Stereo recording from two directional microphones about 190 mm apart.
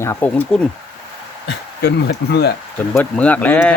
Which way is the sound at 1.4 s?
60° left (ahead or behind).